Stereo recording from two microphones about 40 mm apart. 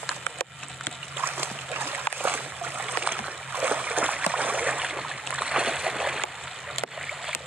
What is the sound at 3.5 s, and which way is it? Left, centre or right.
Splash, right.